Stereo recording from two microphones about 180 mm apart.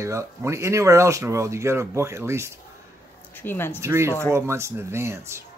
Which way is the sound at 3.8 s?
15° right (ahead or behind).